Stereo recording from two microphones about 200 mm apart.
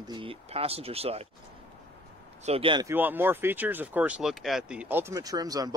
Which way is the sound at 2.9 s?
10° right (ahead or behind).